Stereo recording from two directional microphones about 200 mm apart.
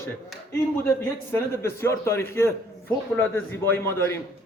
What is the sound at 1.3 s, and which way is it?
A man's voice, 10° left (ahead or behind).